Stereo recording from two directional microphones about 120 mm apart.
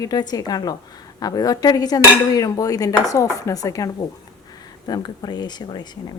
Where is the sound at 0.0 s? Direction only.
35° left (ahead or behind).